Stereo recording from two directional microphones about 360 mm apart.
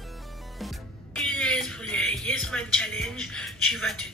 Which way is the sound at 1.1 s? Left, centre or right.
Centre.